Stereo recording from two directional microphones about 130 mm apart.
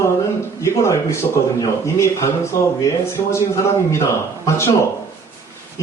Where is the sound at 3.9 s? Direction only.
20° left (ahead or behind).